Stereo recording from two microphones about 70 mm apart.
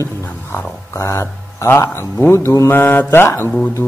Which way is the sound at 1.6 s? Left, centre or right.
Left.